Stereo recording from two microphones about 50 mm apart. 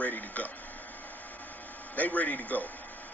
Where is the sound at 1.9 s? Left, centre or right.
Left.